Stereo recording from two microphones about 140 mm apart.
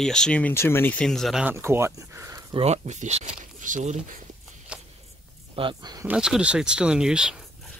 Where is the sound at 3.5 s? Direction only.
65° right (ahead or behind).